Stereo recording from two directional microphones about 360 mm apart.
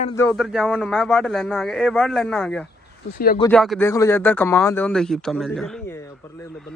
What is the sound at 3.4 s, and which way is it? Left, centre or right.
A man's voice, centre.